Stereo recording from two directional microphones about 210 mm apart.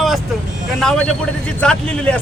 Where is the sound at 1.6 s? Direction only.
5° left (ahead or behind).